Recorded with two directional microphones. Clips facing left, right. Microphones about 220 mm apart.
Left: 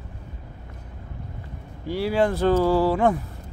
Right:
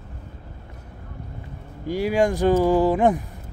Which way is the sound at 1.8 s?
15° right (ahead or behind).